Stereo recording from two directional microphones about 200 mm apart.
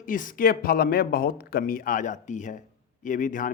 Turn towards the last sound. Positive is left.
turn(degrees=40)  # may be behind; listen again after turning